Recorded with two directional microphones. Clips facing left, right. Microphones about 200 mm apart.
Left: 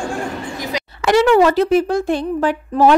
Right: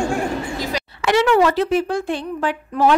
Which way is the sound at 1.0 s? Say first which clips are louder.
Left 3 dB; 40° left (ahead or behind).